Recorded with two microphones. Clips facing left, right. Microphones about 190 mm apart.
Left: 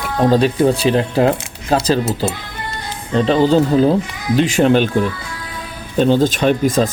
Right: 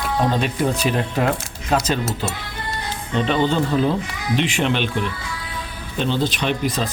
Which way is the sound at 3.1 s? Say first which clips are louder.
Left 7 dB; 35° left (ahead or behind).